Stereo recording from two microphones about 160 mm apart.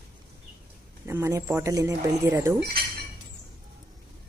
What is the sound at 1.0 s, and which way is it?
Speech, 15° right (ahead or behind).